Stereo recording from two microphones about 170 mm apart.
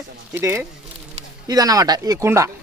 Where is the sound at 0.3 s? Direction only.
15° right (ahead or behind).